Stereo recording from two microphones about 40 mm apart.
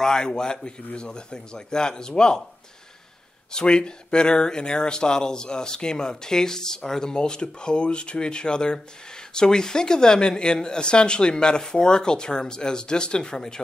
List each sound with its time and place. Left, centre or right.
0.0 s a man's voice: centre
3.5 s speech: left